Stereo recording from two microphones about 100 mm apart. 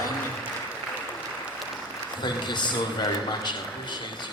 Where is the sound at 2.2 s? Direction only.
50° left (ahead or behind).